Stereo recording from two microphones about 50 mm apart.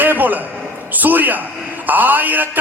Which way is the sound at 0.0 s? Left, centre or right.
Right.